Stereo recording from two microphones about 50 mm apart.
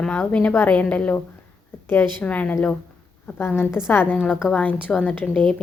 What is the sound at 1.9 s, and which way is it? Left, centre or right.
Speech, left.